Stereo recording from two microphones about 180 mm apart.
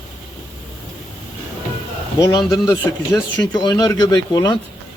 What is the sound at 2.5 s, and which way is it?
A man's voice, 15° left (ahead or behind).